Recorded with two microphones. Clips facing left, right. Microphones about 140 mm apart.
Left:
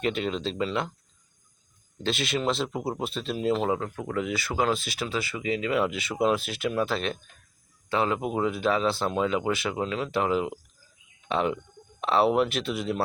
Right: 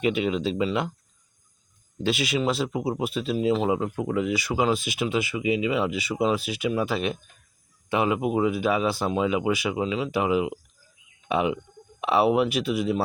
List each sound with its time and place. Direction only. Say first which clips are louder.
0.0 s speech: right 4 dB; 10° right (ahead or behind)
2.0 s speech: right 3 dB; 10° right (ahead or behind)
3.7 s speech: right 3 dB; 15° right (ahead or behind)
4.1 s speech: right 2 dB; 5° right (ahead or behind)